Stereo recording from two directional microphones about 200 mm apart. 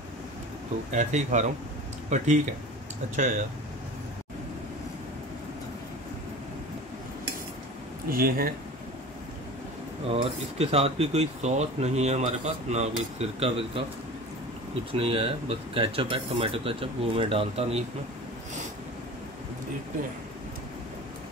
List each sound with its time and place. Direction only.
0.9 s speech: 35° right (ahead or behind)
8.1 s speech: 45° right (ahead or behind)
10.0 s speech: 30° right (ahead or behind)
14.9 s speech: 25° right (ahead or behind)